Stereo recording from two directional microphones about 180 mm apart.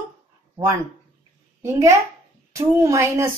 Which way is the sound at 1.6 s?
15° right (ahead or behind).